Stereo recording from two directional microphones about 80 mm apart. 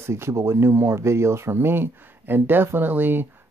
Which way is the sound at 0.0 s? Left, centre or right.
Right.